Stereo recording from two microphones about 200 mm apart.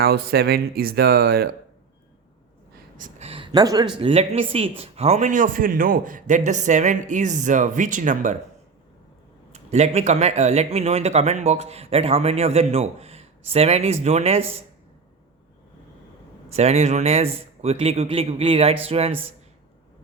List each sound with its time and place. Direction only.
0.0 s speech: 50° right (ahead or behind)
3.0 s a sound: 30° right (ahead or behind)
4.0 s speech: 30° right (ahead or behind)
9.5 s speech: 35° right (ahead or behind)
16.5 s speech: 35° right (ahead or behind)